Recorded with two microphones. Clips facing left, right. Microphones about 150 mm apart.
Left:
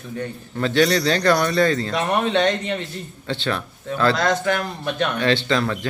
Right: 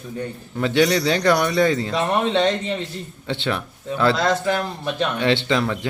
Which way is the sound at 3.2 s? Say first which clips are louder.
Even; 20° right (ahead or behind).